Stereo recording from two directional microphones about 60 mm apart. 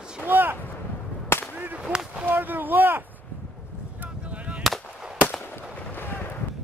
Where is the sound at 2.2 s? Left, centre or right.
Right.